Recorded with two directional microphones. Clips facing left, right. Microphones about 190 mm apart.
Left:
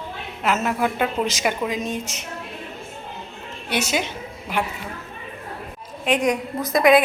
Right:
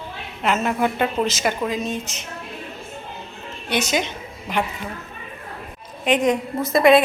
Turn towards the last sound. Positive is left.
turn(degrees=0)  # may be behind; listen again after turning